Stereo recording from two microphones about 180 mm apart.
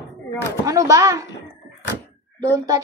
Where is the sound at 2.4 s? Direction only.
20° right (ahead or behind).